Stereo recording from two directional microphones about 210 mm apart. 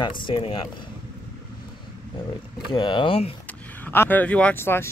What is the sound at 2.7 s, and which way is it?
Speech, 20° left (ahead or behind).